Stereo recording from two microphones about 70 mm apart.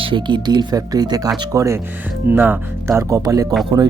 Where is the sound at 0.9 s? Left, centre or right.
Right.